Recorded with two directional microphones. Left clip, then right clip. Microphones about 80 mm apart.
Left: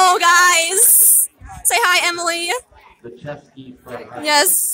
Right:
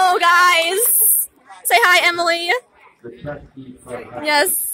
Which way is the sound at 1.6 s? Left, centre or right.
Centre.